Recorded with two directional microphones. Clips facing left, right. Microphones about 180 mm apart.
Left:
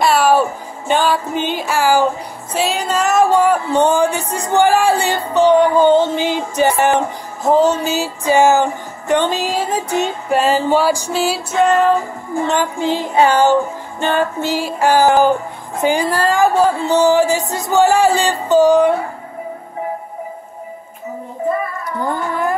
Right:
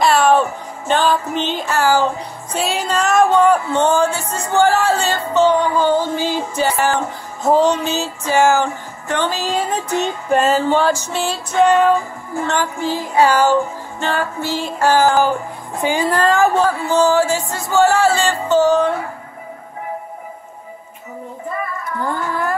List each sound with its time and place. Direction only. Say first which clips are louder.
0.0 s music: even; 5° left (ahead or behind)
2.5 s music: left 2 dB; centre (ahead or behind); by 7.0 s 20° left (ahead or behind)
7.4 s music: left 1 dB; centre (ahead or behind); by 9.5 s 20° left (ahead or behind)
9.5 s music: left 1 dB; 5° left (ahead or behind)
12.4 s music: left 2 dB; 20° left (ahead or behind)
16.6 s music: left 2 dB; 20° left (ahead or behind)
22.0 s music: left 2 dB; 20° left (ahead or behind)